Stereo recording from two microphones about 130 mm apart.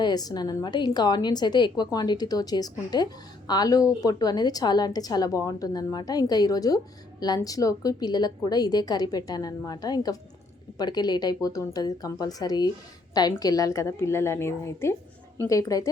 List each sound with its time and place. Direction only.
0.0 s a woman's voice: 30° left (ahead or behind)